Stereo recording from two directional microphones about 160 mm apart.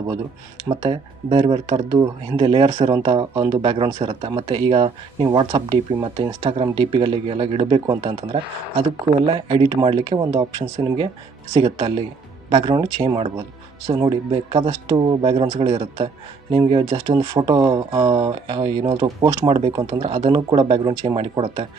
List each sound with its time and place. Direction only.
0.7 s speech: 30° right (ahead or behind)
11.5 s speech: 30° right (ahead or behind)